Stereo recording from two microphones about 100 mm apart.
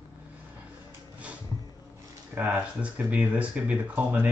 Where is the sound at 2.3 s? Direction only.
15° right (ahead or behind).